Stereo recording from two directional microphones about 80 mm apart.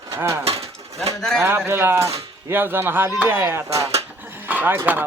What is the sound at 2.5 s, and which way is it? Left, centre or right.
Speech, right.